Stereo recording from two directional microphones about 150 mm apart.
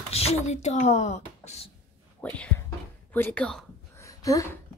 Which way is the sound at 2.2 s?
10° left (ahead or behind).